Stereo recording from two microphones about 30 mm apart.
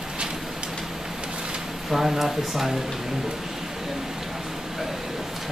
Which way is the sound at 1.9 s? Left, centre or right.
Centre.